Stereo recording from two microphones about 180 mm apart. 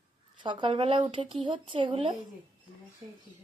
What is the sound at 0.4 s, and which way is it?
Speech, 25° right (ahead or behind).